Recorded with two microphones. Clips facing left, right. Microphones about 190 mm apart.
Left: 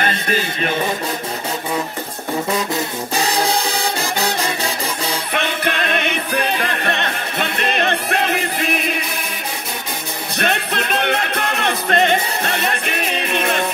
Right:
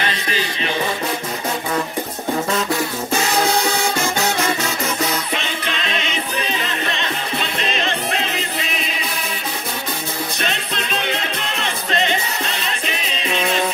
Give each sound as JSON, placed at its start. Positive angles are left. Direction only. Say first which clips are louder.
{"t": 0.0, "sound": "music", "louder": "left 3 dB", "side_deg": 50}
{"t": 4.0, "sound": "music", "louder": "right 1 dB", "side_deg": 35}
{"t": 5.3, "sound": "music", "louder": "left 4 dB", "side_deg": 55}
{"t": 10.4, "sound": "music", "louder": "left 4 dB", "side_deg": 55}